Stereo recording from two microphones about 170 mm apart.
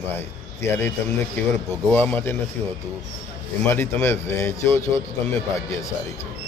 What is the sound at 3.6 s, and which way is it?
A man's voice, 15° left (ahead or behind).